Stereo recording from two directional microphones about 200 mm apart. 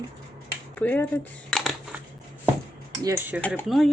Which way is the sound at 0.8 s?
10° left (ahead or behind).